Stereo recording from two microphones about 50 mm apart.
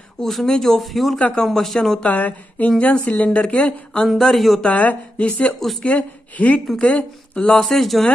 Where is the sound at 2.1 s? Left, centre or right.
Left.